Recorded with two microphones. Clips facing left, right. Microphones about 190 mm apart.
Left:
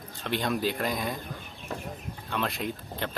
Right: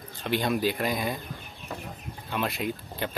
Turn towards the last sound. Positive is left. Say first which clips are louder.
# right 2 dB
turn(degrees=-5)  # may be behind; listen again after turning